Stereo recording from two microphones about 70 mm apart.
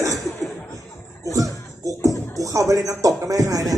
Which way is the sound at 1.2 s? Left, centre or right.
Right.